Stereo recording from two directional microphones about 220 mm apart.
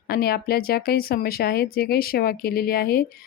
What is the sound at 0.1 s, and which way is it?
Speech, 45° left (ahead or behind).